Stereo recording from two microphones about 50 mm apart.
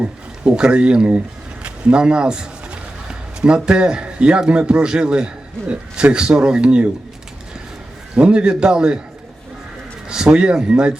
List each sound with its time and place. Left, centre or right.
0.0 s a man's voice: centre
8.1 s a man's voice: right
10.1 s a man's voice: centre